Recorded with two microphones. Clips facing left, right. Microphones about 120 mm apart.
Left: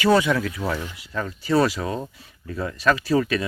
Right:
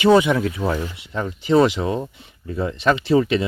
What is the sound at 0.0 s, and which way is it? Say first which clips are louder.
Speech: right 4 dB; 20° right (ahead or behind).